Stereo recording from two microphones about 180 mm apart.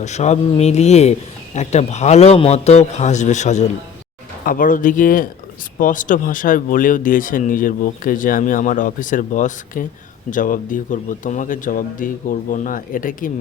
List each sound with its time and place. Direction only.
0.0 s a man's voice: 40° left (ahead or behind)